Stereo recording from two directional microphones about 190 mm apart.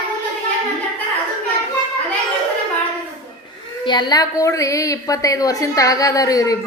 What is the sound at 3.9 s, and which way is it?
A woman's voice, 25° left (ahead or behind).